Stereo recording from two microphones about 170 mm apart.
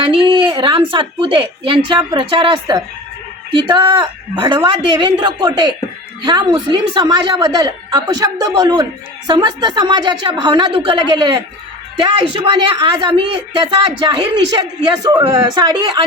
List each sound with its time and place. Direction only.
0.0 s a woman's voice: 30° right (ahead or behind)